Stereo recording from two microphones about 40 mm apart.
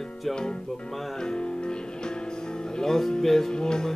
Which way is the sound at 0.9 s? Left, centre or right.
Centre.